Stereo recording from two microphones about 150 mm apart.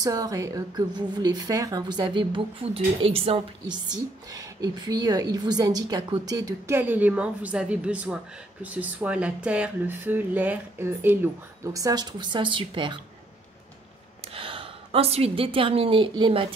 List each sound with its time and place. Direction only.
0.0 s speech: 25° right (ahead or behind)
6.8 s speech: 10° right (ahead or behind); by 13.0 s 35° right (ahead or behind)
14.3 s a woman's voice: 35° right (ahead or behind)